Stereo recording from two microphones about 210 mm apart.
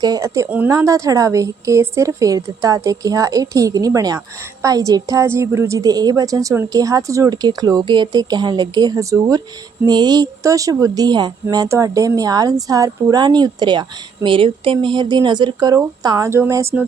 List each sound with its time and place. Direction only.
0.0 s a woman's voice: 15° right (ahead or behind)